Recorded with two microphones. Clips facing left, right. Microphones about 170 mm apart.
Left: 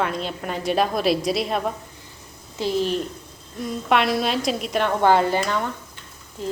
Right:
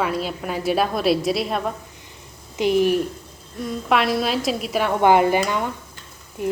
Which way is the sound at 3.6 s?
Centre (ahead or behind).